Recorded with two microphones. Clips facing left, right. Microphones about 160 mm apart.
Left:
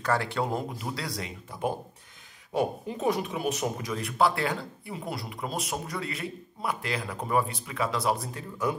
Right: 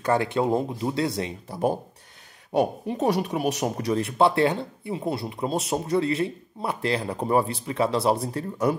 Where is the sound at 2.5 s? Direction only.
70° right (ahead or behind).